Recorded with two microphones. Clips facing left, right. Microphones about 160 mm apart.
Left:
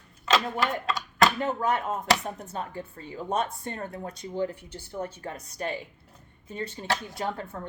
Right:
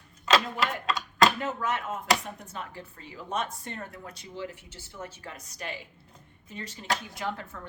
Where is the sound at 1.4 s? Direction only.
35° left (ahead or behind).